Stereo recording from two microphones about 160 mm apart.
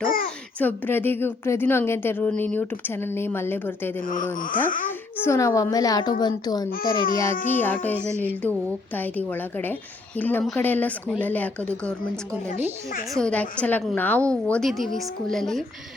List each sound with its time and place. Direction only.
0.0 s a child's voice: 60° left (ahead or behind)
0.6 s a woman's voice: 10° left (ahead or behind)
4.0 s speech: 55° left (ahead or behind)
4.9 s a child's voice: 15° left (ahead or behind)
7.4 s a woman's voice: 10° left (ahead or behind)
13.1 s a woman's voice: 5° left (ahead or behind)